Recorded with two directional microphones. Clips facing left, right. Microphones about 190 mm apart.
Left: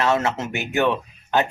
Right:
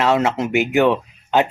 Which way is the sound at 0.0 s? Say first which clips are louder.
Right 4 dB; 15° right (ahead or behind).